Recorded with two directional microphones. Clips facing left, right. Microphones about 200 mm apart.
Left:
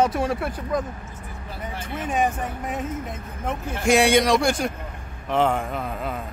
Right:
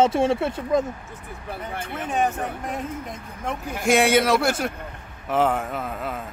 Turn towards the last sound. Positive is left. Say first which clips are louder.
# left 1 dB
turn(degrees=0)  # may be behind; listen again after turning